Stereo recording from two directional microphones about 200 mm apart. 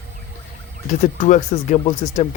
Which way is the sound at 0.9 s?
40° left (ahead or behind).